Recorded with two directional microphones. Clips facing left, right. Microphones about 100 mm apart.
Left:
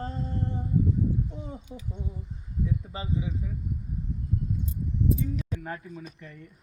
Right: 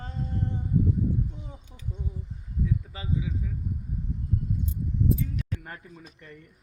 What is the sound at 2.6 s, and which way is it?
Speech, 30° left (ahead or behind).